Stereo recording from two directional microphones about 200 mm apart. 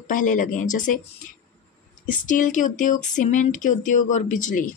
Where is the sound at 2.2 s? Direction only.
40° left (ahead or behind).